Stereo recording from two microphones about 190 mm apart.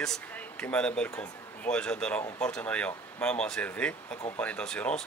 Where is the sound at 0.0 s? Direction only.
5° left (ahead or behind).